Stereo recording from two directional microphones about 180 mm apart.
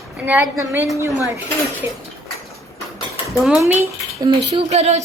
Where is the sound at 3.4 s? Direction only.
10° right (ahead or behind).